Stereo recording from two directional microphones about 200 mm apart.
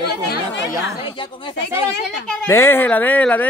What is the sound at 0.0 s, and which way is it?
Chatter, 50° left (ahead or behind).